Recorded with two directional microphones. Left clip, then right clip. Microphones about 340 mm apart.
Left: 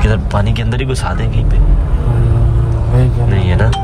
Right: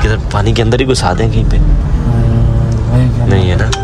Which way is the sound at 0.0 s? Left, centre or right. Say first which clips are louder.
Right 2 dB; centre.